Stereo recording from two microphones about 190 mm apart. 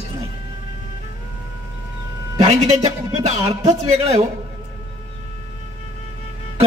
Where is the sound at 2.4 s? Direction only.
35° right (ahead or behind).